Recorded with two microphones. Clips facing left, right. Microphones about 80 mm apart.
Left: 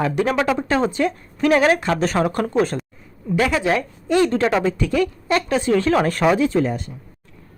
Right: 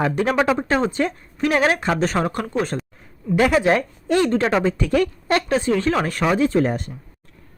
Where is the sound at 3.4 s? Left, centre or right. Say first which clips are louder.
Right 3 dB; right.